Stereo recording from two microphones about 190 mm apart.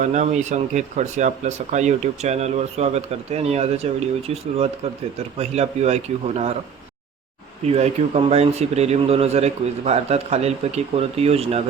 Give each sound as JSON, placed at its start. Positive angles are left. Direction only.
{"t": 0.0, "sound": "speech", "side_deg": -40}
{"t": 7.7, "sound": "speech", "side_deg": -35}